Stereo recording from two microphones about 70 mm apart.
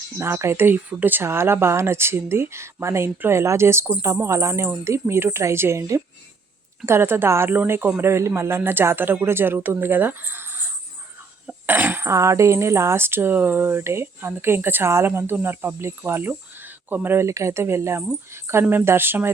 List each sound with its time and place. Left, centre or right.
0.2 s speech: right
0.5 s speech: right
8.0 s speech: right
11.4 s cough: right
12.0 s speech: right
17.2 s speech: right